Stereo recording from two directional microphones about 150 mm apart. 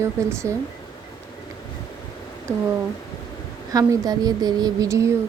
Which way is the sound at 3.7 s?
25° right (ahead or behind).